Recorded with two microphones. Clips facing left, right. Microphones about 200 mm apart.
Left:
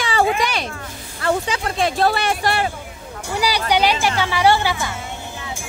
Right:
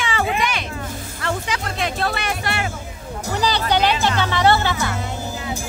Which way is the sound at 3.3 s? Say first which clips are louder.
Left 1 dB; 10° left (ahead or behind).